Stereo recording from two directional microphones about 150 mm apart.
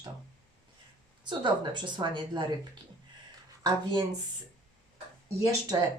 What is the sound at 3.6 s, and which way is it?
Speech, 30° right (ahead or behind).